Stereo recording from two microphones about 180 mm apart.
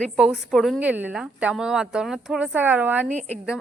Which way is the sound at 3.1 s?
40° right (ahead or behind).